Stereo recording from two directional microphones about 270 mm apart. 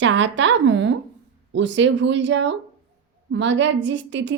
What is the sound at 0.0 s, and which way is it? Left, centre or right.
A woman's voice, right.